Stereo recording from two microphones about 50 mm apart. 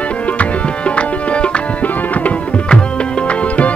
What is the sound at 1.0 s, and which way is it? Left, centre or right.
Tabla, left.